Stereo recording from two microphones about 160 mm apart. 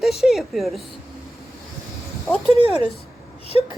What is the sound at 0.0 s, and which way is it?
Speech, centre (ahead or behind).